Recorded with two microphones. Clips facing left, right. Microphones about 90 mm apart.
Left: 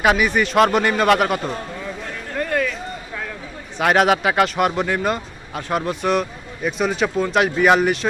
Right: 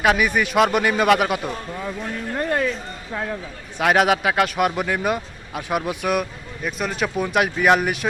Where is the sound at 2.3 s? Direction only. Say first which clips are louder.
Left 1 dB; 25° right (ahead or behind).